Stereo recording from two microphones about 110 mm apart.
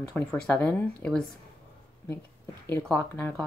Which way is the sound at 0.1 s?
10° left (ahead or behind).